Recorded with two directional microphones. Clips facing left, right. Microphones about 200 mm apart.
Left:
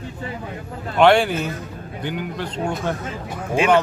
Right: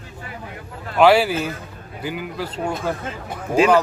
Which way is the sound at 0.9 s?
5° right (ahead or behind).